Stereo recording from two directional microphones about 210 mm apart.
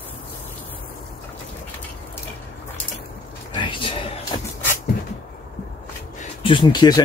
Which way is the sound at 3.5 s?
20° left (ahead or behind).